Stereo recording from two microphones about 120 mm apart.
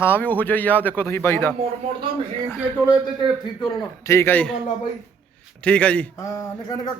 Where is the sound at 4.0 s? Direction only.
25° left (ahead or behind).